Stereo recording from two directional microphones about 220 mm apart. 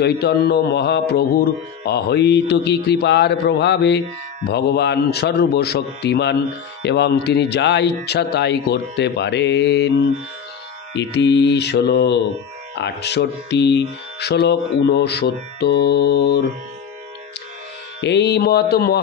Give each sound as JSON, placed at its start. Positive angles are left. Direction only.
{"t": 0.0, "sound": "speech", "side_deg": 45}
{"t": 11.0, "sound": "speech", "side_deg": 50}
{"t": 18.0, "sound": "speech", "side_deg": 50}